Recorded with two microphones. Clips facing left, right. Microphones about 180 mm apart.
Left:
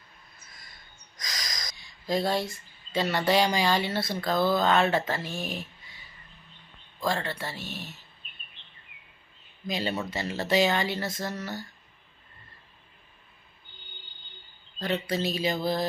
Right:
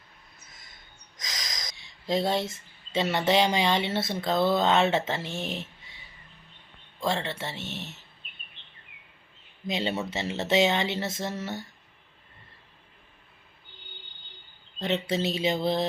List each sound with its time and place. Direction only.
1.1 s speech: 20° right (ahead or behind)
7.0 s speech: 25° right (ahead or behind)
9.6 s speech: 25° right (ahead or behind)
14.8 s speech: 25° right (ahead or behind)